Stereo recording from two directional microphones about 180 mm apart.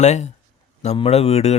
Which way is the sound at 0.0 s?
40° left (ahead or behind).